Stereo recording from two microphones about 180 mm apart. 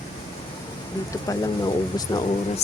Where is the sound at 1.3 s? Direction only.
20° left (ahead or behind).